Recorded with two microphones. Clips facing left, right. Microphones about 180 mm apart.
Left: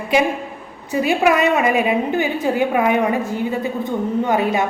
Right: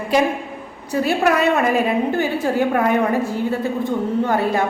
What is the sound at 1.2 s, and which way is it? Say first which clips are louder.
A woman's voice: left 1 dB; 5° left (ahead or behind).